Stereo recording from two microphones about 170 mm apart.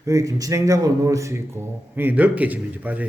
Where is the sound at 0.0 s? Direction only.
20° right (ahead or behind).